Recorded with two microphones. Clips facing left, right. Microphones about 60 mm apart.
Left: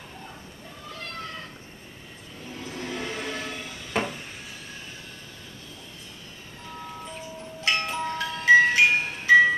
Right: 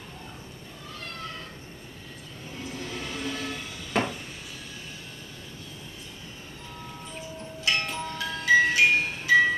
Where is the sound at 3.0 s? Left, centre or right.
Left.